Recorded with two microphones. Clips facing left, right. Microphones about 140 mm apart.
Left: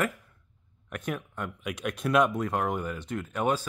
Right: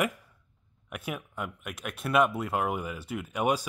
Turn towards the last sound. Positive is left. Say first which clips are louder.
# even
turn(degrees=-10)  # may be behind; listen again after turning